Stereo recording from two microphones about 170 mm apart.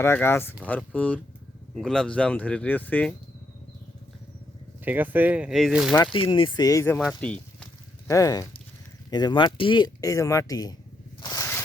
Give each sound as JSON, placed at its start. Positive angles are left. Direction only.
{"t": 0.0, "sound": "speech", "side_deg": 15}
{"t": 4.9, "sound": "speech", "side_deg": -10}
{"t": 6.1, "sound": "speech", "side_deg": 30}
{"t": 7.0, "sound": "speech", "side_deg": 5}
{"t": 8.0, "sound": "speech", "side_deg": 20}
{"t": 11.2, "sound": "zipper", "side_deg": 20}